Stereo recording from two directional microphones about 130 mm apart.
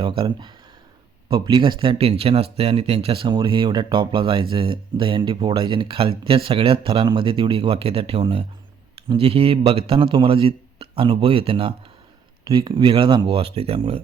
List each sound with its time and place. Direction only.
0.0 s speech: 35° right (ahead or behind)